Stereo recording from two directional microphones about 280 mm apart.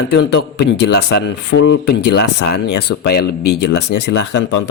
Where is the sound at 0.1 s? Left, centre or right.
Left.